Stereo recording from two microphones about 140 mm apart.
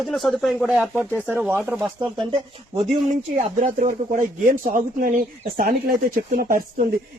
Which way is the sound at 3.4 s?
65° right (ahead or behind).